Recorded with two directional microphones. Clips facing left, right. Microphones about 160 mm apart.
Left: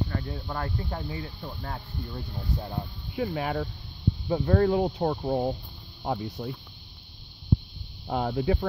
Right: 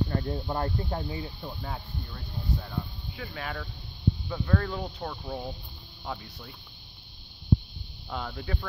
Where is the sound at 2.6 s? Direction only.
30° left (ahead or behind).